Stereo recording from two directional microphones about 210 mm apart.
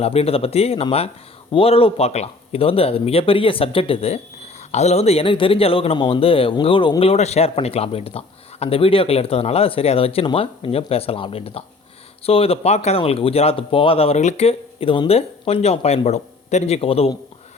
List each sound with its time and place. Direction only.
0.0 s speech: 30° left (ahead or behind)